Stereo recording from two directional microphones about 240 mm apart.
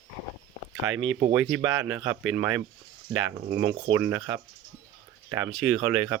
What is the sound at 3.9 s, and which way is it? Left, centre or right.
Speech, centre.